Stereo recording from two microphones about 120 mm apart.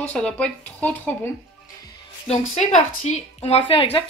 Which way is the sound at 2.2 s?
60° left (ahead or behind).